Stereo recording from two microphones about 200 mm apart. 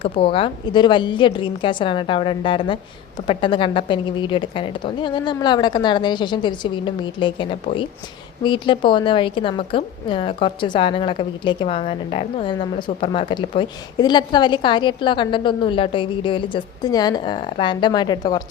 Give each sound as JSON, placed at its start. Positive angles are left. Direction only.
{"t": 0.0, "sound": "a woman's voice", "side_deg": 25}